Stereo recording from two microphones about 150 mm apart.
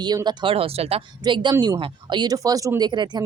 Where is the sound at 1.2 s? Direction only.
30° right (ahead or behind).